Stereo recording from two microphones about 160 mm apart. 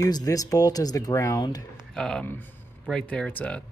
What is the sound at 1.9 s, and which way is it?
Speech, 5° left (ahead or behind).